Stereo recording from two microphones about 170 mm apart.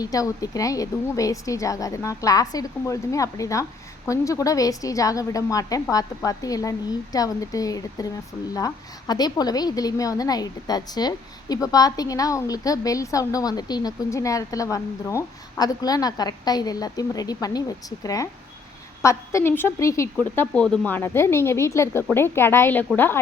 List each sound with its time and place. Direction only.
0.0 s a woman's voice: 20° left (ahead or behind)